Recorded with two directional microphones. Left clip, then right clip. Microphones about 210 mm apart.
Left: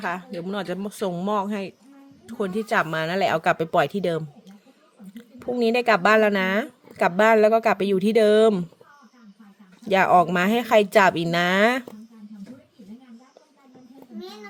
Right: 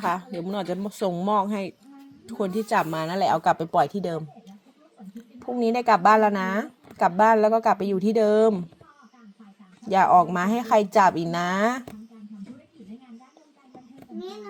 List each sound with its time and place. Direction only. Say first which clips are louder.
0.0 s speech: right 2 dB; centre (ahead or behind); by 3.8 s 20° left (ahead or behind)
5.5 s speech: left 1 dB; 40° left (ahead or behind)
10.1 s speech: left 1 dB; 40° left (ahead or behind)